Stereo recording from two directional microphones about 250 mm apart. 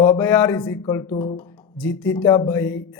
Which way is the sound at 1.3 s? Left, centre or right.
Centre.